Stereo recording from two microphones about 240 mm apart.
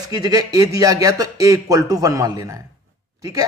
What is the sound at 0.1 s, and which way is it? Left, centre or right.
Speech, centre.